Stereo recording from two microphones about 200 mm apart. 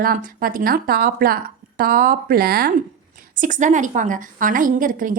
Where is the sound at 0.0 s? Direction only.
45° right (ahead or behind).